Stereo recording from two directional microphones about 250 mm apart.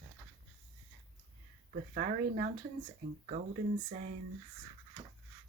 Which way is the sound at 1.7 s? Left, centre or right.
Right.